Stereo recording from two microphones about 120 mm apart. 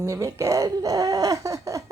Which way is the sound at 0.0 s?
30° right (ahead or behind).